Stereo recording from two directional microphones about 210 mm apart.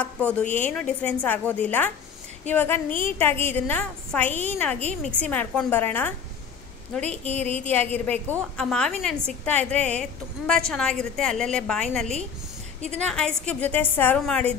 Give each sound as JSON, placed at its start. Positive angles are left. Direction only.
{"t": 0.0, "sound": "a woman's voice", "side_deg": 5}
{"t": 7.0, "sound": "a woman's voice", "side_deg": -30}
{"t": 7.6, "sound": "a woman's voice", "side_deg": 10}